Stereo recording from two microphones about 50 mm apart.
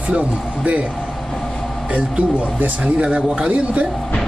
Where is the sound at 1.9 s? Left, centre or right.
Right.